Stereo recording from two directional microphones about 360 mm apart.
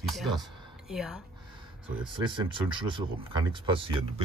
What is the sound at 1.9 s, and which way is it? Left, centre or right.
Speech, centre.